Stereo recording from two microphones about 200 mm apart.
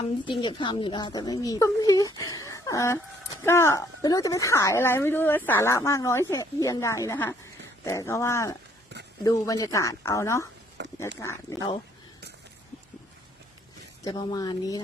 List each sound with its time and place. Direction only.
0.3 s a woman's voice: 25° left (ahead or behind)
10.8 s a sound: 60° right (ahead or behind)
11.2 s a woman's voice: 15° left (ahead or behind)
14.0 s speech: 20° left (ahead or behind)